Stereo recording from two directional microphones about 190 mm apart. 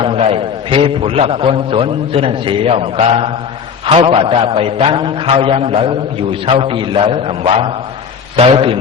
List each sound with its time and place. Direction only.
0.0 s a man's voice: 30° right (ahead or behind)